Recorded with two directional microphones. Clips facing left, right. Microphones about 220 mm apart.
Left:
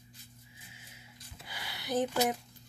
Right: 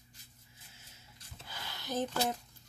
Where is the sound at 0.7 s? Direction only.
15° left (ahead or behind).